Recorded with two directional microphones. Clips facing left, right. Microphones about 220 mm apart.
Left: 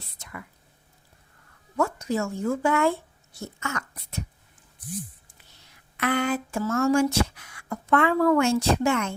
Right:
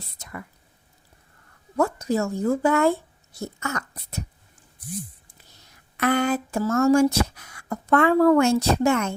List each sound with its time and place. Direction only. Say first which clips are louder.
0.2 s whispering: right 3 dB; 40° right (ahead or behind)
1.7 s speech: right 3 dB; 35° right (ahead or behind)
5.5 s speech: right 4 dB; 45° right (ahead or behind)